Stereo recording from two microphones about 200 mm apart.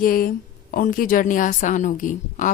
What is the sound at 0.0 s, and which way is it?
A woman's voice, 45° left (ahead or behind).